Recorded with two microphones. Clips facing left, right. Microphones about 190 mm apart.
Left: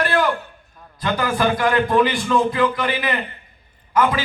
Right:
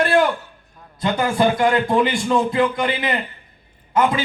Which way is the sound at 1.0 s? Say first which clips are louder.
Right 2 dB; 25° right (ahead or behind).